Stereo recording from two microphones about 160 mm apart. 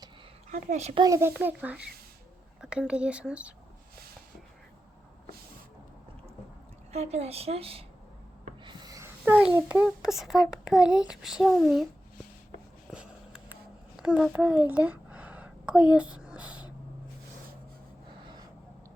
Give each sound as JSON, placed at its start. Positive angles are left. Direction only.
{"t": 0.5, "sound": "a child's voice", "side_deg": -45}
{"t": 1.0, "sound": "speech", "side_deg": -15}
{"t": 6.9, "sound": "a woman's voice", "side_deg": -40}
{"t": 8.6, "sound": "a sound", "side_deg": -25}
{"t": 9.3, "sound": "a child's voice", "side_deg": -10}
{"t": 11.6, "sound": "a sound", "side_deg": 0}